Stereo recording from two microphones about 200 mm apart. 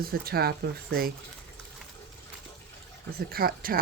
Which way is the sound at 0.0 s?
50° right (ahead or behind).